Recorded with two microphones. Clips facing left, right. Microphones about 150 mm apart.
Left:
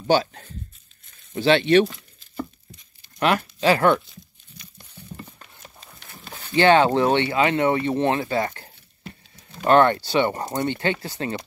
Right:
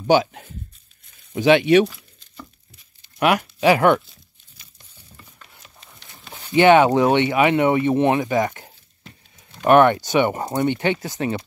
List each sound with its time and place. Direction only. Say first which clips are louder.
0.0 s speech: right 3 dB; 15° right (ahead or behind)
1.1 s a sound: right 3 dB; 10° right (ahead or behind)
2.7 s tearing: left 7 dB; 10° right (ahead or behind)
4.6 s a sound: left 8 dB; 5° right (ahead or behind)
6.3 s speech: right 3 dB; 15° right (ahead or behind)
9.7 s speech: right 3 dB; 15° right (ahead or behind)